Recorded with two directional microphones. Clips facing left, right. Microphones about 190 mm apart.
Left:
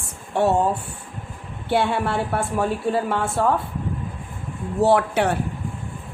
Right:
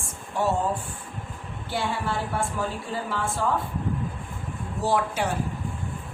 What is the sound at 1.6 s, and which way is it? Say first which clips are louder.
Speech: left 7 dB; 65° left (ahead or behind).